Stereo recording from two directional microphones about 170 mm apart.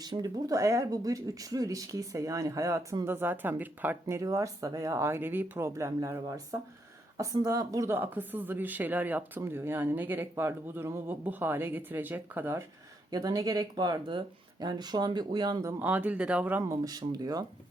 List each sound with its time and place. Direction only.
0.0 s speech: 25° right (ahead or behind)
15.8 s speech: 10° right (ahead or behind)
16.7 s speech: 20° right (ahead or behind)